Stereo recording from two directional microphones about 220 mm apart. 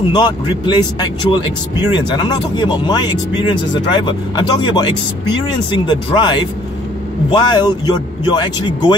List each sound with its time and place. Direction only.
0.1 s speech: 20° left (ahead or behind)